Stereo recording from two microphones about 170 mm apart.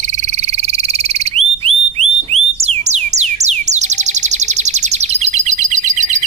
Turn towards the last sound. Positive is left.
turn(degrees=-45)  # may be behind; listen again after turning